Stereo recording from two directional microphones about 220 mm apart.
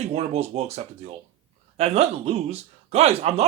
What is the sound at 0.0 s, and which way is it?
Speech, 30° right (ahead or behind).